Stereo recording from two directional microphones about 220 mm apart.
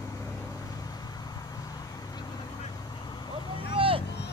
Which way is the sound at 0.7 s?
15° left (ahead or behind).